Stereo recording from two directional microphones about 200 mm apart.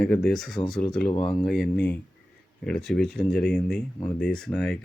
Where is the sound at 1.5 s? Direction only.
5° left (ahead or behind).